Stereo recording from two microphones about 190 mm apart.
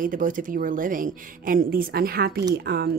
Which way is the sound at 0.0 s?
45° right (ahead or behind).